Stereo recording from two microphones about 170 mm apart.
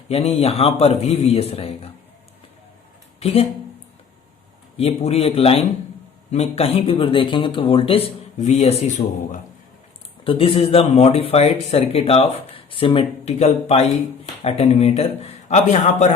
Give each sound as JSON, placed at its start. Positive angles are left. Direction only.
{"t": 0.1, "sound": "speech", "side_deg": 35}
{"t": 4.8, "sound": "speech", "side_deg": 35}
{"t": 10.2, "sound": "speech", "side_deg": 30}